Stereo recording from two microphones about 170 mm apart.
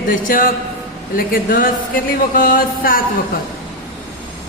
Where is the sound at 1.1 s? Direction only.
55° left (ahead or behind).